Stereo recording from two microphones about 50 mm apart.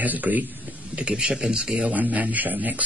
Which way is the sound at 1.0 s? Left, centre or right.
Right.